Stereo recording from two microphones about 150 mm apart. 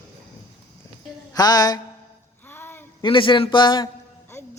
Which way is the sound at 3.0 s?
35° left (ahead or behind).